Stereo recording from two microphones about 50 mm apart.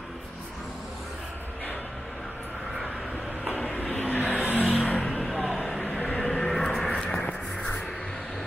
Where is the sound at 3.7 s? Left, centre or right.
Left.